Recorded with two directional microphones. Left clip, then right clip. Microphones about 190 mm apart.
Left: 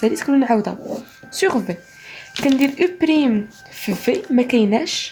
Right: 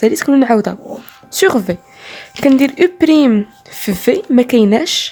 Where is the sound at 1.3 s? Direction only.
45° right (ahead or behind).